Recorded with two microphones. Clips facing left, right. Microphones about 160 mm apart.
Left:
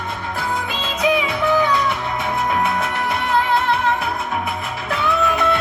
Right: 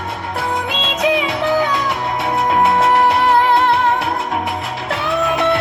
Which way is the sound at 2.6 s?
70° right (ahead or behind).